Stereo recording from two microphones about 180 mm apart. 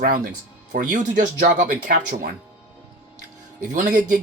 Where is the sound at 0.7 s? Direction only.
45° right (ahead or behind).